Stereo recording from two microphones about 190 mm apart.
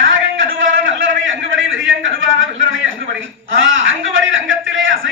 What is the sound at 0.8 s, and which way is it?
A man's voice, 90° right.